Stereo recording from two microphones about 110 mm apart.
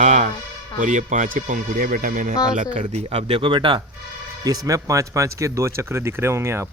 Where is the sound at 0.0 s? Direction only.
90° right.